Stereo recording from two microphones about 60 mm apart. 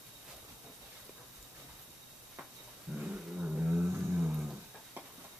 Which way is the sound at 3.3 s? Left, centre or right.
Centre.